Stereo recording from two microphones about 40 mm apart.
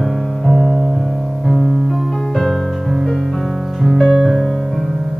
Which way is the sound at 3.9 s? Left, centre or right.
Centre.